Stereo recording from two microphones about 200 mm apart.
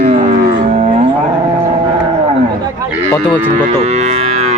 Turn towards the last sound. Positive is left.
turn(degrees=-35)  # may be behind; listen again after turning